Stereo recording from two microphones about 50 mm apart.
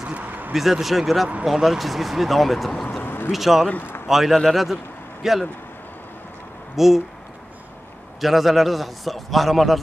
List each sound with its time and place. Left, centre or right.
0.2 s a sound: right
0.5 s a man's voice: centre
3.0 s a sound: left
3.3 s a man's voice: centre
6.8 s a man's voice: centre
8.2 s a man's voice: centre